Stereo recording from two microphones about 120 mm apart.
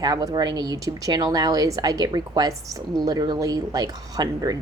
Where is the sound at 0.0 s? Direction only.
35° right (ahead or behind).